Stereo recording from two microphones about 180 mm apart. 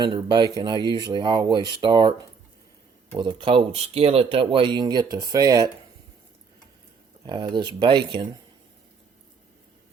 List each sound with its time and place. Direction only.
0.0 s speech: 25° right (ahead or behind)
7.3 s speech: 25° right (ahead or behind)